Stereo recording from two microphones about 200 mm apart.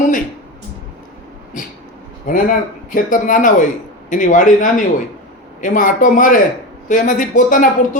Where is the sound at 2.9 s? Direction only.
40° left (ahead or behind).